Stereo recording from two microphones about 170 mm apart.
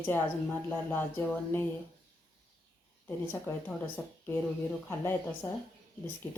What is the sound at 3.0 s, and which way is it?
Speech, 10° left (ahead or behind).